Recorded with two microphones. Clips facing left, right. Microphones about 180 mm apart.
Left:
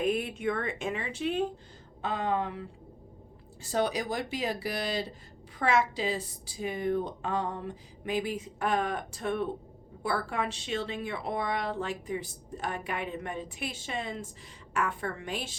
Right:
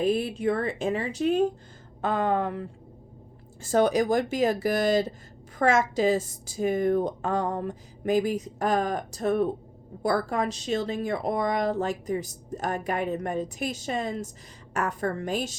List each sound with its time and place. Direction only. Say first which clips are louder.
0.0 s a woman's voice: right 4 dB; 30° right (ahead or behind)